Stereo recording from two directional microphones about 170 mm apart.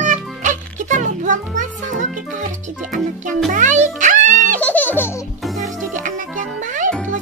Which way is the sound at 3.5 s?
50° right (ahead or behind).